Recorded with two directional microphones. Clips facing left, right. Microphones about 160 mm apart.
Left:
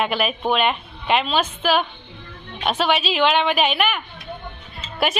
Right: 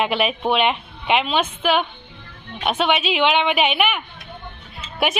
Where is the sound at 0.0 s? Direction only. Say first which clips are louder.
Right 1 dB; 20° right (ahead or behind).